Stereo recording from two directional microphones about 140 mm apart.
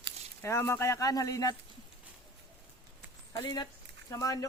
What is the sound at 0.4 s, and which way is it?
Speech, 20° left (ahead or behind).